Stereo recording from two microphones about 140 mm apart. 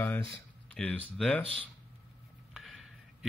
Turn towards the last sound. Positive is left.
turn(degrees=0)  # may be behind; listen again after turning